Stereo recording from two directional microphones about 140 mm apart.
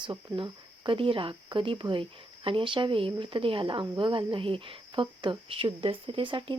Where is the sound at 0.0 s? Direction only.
35° right (ahead or behind).